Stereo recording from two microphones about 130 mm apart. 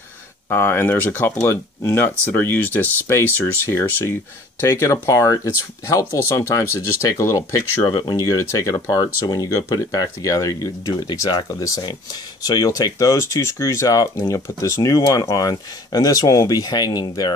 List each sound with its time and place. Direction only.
0.5 s speech: 20° left (ahead or behind)